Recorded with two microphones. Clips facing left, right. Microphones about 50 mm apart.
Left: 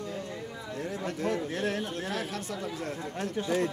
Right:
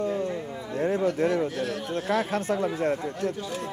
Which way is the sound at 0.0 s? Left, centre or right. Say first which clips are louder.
Right 9 dB; right.